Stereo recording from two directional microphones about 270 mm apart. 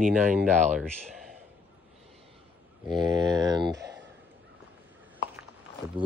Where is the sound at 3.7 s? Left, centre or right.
Right.